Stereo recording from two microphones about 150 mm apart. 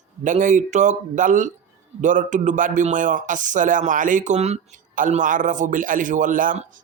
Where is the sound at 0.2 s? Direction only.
55° right (ahead or behind).